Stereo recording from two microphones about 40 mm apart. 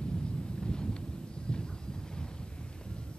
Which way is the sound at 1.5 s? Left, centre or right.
Left.